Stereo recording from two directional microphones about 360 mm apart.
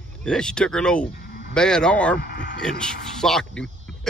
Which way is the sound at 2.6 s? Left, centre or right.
Centre.